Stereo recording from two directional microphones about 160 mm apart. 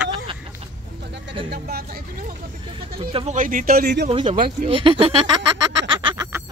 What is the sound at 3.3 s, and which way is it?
Speech, 55° right (ahead or behind).